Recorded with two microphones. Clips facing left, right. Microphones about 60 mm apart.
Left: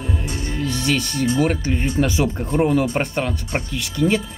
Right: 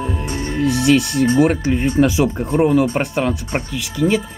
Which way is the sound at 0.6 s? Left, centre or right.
Centre.